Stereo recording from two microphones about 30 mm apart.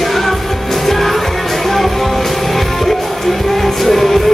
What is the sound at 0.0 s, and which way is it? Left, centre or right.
Music, centre.